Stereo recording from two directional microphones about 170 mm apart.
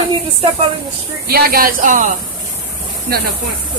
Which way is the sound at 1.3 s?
60° right (ahead or behind).